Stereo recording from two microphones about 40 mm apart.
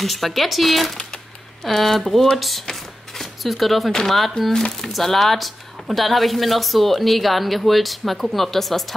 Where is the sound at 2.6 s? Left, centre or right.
Centre.